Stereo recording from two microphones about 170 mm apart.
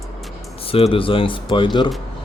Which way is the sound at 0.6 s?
35° left (ahead or behind).